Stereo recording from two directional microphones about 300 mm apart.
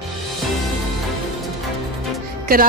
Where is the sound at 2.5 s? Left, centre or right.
Right.